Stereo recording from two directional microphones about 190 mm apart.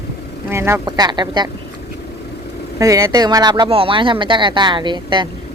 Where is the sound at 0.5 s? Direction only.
15° right (ahead or behind).